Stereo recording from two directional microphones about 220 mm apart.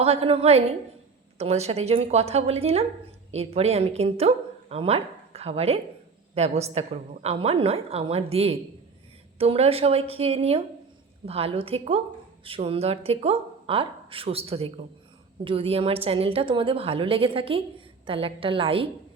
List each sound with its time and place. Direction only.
0.0 s a woman's voice: 25° right (ahead or behind)